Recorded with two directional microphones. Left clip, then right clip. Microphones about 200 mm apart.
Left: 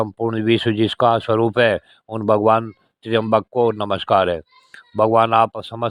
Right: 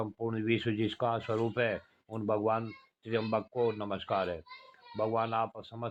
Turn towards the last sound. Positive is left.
turn(degrees=55)  # may be behind; listen again after turning